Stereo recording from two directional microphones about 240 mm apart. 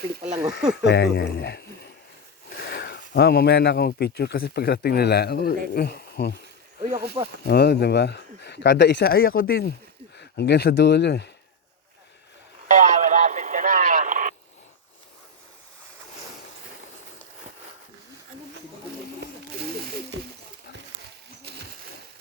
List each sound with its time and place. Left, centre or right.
0.1 s speech: right
0.9 s speech: left
2.6 s a sound: left
3.1 s speech: left
7.4 s speech: left
12.6 s radio: right